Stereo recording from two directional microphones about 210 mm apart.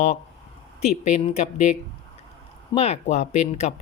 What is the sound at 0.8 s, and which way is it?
Speech, 30° left (ahead or behind).